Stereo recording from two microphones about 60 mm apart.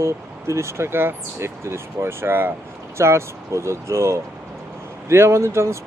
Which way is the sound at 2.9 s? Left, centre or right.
Right.